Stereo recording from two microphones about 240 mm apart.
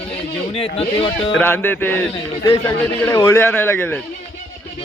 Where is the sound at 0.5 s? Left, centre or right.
Left.